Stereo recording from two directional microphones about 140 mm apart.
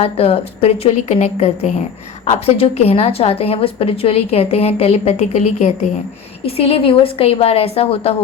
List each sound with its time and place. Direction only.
0.0 s a woman's voice: 45° left (ahead or behind)
6.4 s a woman's voice: 45° left (ahead or behind)